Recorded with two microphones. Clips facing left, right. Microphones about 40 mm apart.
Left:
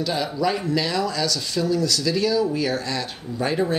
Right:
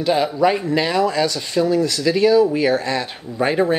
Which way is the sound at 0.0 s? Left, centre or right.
Right.